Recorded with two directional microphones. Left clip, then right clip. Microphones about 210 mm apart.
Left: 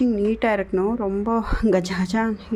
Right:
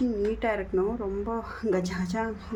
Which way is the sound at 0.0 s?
40° left (ahead or behind).